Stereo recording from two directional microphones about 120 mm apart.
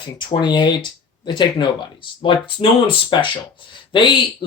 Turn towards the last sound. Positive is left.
turn(degrees=40)  # may be behind; listen again after turning